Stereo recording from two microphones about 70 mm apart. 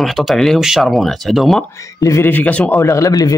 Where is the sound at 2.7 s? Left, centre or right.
Left.